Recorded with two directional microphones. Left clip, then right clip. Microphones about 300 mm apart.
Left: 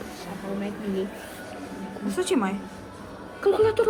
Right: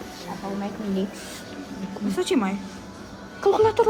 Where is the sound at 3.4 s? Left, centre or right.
Right.